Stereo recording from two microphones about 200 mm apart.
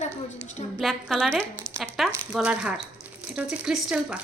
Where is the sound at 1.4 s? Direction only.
15° right (ahead or behind).